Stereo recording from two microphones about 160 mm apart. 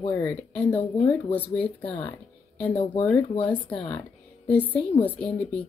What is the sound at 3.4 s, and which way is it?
A woman's voice, 10° left (ahead or behind).